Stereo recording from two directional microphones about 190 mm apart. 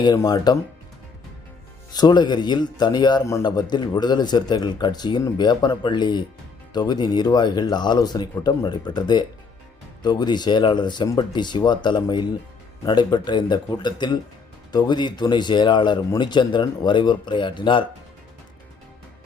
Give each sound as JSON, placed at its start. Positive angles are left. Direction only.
{"t": 0.0, "sound": "a man's voice", "side_deg": 20}
{"t": 1.9, "sound": "a man's voice", "side_deg": 20}